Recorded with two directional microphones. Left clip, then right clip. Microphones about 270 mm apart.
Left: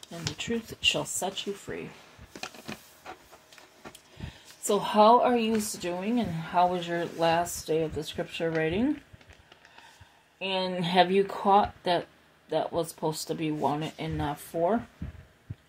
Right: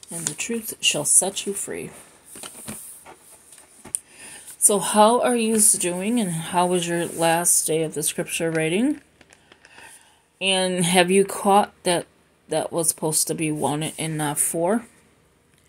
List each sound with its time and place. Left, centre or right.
0.1 s speech: right
4.6 s speech: right
10.4 s speech: right